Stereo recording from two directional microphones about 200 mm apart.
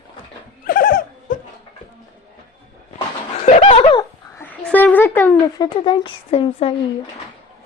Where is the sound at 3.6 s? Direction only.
30° left (ahead or behind).